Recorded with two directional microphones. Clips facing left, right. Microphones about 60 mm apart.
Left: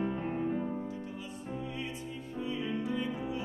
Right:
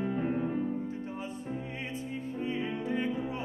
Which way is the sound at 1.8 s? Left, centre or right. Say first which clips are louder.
Right 2 dB; right.